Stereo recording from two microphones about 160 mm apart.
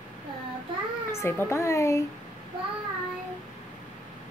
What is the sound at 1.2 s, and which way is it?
Speech, 15° left (ahead or behind).